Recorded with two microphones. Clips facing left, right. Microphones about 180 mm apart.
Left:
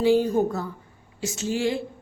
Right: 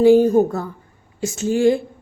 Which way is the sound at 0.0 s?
50° right (ahead or behind).